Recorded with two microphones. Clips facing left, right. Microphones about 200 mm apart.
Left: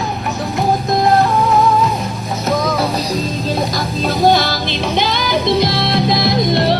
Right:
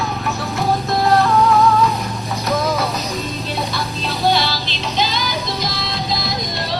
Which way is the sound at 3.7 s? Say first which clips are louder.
Left 6 dB; 45° left (ahead or behind).